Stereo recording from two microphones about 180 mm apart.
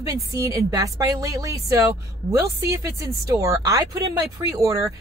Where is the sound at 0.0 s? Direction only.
15° right (ahead or behind).